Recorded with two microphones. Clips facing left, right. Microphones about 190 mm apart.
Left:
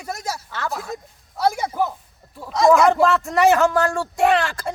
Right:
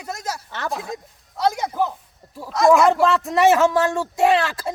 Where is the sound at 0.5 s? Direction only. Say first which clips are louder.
Right 1 dB; 20° right (ahead or behind).